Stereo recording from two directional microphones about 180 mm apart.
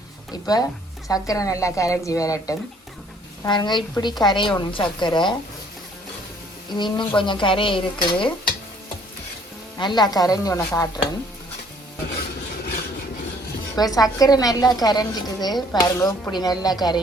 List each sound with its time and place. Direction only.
0.4 s a woman's voice: 20° left (ahead or behind)
6.7 s a woman's voice: 25° left (ahead or behind)
9.7 s a woman's voice: 25° left (ahead or behind)
13.7 s a woman's voice: 20° left (ahead or behind)